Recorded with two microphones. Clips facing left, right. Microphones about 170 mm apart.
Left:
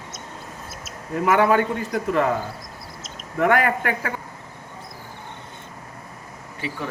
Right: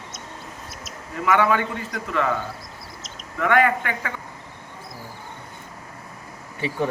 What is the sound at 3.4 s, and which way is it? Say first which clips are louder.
Speech: even; 45° left (ahead or behind).